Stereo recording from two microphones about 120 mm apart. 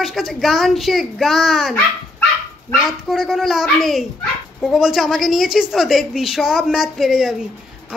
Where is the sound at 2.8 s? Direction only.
Centre (ahead or behind).